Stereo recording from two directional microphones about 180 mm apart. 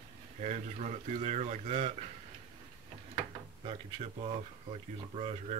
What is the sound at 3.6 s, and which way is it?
Speech, 35° right (ahead or behind).